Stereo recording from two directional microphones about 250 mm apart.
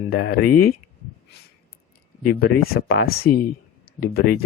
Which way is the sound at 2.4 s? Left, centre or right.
Left.